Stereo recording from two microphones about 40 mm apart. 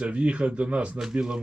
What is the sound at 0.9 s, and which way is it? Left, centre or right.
Speech, centre.